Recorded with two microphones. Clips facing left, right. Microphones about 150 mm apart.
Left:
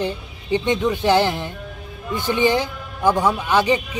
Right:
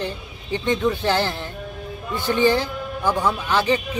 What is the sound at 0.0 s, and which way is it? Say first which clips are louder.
Speech: left 4 dB; 15° left (ahead or behind).